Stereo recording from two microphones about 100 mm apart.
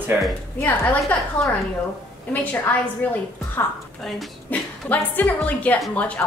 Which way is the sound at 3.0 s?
15° left (ahead or behind).